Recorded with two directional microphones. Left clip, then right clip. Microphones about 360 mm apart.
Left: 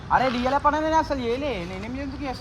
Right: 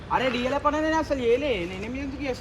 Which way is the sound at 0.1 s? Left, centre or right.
Centre.